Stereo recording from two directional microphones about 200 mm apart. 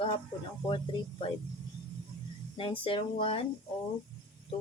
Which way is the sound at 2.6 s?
25° left (ahead or behind).